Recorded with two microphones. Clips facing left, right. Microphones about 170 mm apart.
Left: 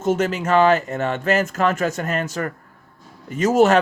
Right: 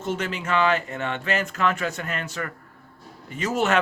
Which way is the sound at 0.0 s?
45° left (ahead or behind).